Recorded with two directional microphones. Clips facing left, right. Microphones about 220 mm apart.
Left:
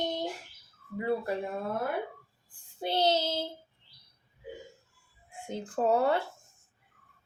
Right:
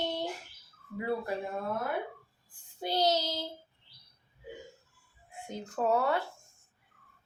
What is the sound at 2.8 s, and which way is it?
Speech, 25° left (ahead or behind).